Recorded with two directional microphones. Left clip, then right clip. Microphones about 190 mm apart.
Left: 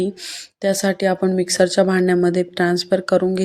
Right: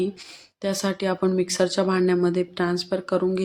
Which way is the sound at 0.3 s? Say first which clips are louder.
Left 8 dB; 15° left (ahead or behind).